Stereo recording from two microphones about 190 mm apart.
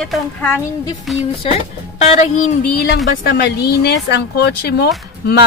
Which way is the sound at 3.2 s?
55° left (ahead or behind).